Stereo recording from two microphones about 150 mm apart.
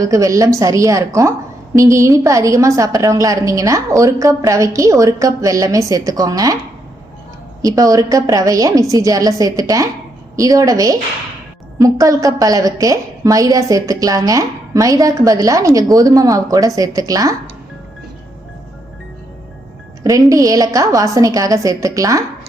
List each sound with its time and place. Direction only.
0.0 s a woman's voice: 20° right (ahead or behind)
7.6 s a woman's voice: 25° right (ahead or behind)
20.1 s a woman's voice: 20° right (ahead or behind)